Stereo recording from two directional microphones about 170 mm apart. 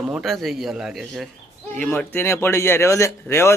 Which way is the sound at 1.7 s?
10° left (ahead or behind).